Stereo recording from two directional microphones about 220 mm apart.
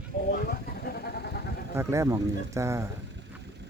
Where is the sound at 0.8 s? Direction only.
45° left (ahead or behind).